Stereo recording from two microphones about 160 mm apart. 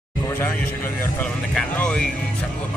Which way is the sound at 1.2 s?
5° left (ahead or behind).